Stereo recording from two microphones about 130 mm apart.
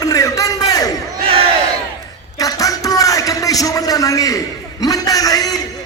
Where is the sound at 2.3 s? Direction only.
25° left (ahead or behind).